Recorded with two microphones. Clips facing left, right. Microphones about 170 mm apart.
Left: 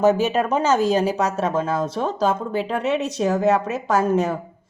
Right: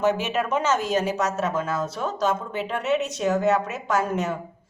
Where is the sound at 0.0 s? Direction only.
35° left (ahead or behind).